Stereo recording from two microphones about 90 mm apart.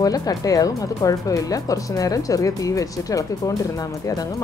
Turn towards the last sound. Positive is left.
turn(degrees=40)  # may be behind; listen again after turning